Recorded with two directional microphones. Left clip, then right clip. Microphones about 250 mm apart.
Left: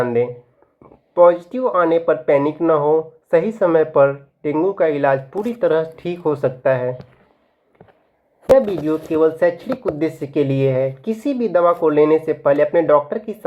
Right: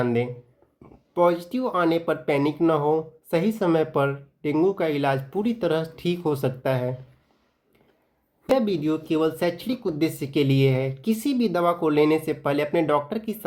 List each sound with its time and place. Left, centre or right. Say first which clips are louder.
0.0 s speech: left 7 dB; right
8.5 s speech: left 7 dB; right